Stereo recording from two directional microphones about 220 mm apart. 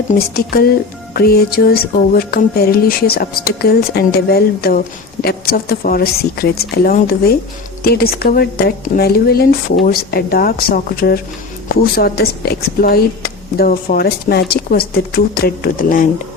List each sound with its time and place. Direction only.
0.1 s speech: 45° left (ahead or behind)